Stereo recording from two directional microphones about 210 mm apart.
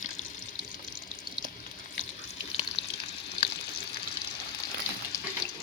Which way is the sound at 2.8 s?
60° left (ahead or behind).